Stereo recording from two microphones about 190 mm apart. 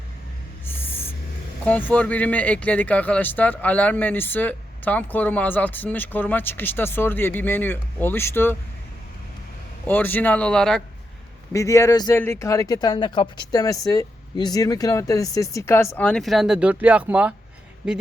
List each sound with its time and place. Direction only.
0.6 s music: 10° left (ahead or behind)
1.6 s speech: 10° left (ahead or behind)
9.8 s speech: 10° left (ahead or behind)
11.5 s speech: 15° left (ahead or behind); by 17.3 s 5° right (ahead or behind)